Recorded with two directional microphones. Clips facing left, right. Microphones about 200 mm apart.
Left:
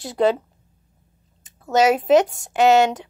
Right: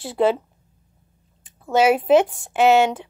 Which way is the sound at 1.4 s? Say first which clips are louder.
Even; 40° left (ahead or behind).